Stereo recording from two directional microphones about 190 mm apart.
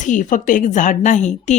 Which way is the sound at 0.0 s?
45° left (ahead or behind).